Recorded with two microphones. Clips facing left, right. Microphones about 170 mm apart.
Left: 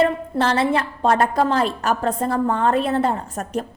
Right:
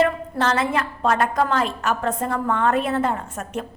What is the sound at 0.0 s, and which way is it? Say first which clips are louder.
A woman's voice: left 2 dB; 30° left (ahead or behind).